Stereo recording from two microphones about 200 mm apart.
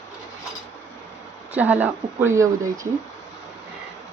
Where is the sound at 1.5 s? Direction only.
10° right (ahead or behind).